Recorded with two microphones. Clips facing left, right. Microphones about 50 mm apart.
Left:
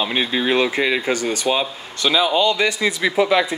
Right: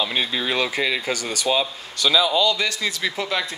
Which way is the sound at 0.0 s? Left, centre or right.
Left.